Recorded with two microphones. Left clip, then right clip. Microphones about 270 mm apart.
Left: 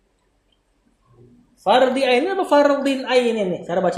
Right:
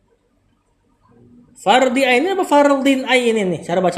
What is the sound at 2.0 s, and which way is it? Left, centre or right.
A woman's voice, right.